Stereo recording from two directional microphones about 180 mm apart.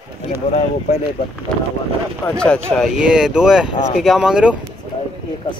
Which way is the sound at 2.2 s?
5° left (ahead or behind).